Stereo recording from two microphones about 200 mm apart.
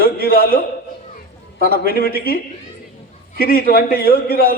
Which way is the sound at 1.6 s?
45° left (ahead or behind).